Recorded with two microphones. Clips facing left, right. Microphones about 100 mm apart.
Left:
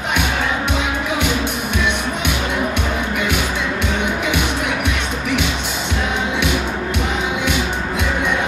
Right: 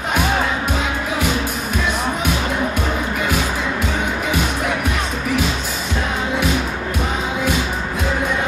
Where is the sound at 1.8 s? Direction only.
75° left (ahead or behind).